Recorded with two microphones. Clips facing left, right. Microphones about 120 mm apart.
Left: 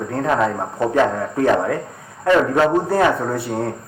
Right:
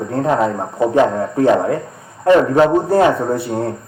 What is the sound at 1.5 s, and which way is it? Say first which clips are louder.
Speech: right 3 dB; 30° right (ahead or behind).